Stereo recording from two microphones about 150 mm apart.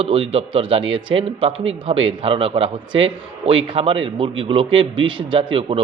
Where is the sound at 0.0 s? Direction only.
40° right (ahead or behind).